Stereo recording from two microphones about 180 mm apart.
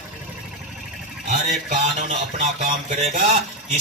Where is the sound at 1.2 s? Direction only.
40° right (ahead or behind).